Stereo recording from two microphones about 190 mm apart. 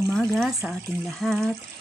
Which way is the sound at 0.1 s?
Centre (ahead or behind).